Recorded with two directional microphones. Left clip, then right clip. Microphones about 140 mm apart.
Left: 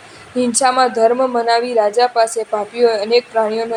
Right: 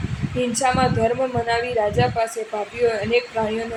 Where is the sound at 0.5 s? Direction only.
40° left (ahead or behind).